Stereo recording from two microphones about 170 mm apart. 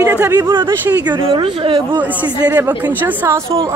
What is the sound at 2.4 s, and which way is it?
Speech, 10° right (ahead or behind).